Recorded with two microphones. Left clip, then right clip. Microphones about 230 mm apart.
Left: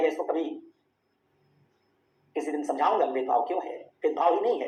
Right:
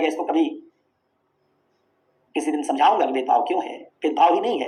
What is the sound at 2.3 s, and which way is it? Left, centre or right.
Speech, right.